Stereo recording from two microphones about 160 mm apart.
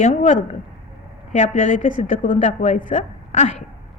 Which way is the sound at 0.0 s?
50° left (ahead or behind).